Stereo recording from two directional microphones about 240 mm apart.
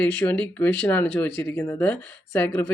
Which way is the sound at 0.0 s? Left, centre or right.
Centre.